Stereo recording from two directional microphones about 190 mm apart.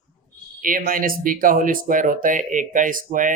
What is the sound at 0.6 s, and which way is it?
Speech, 45° right (ahead or behind).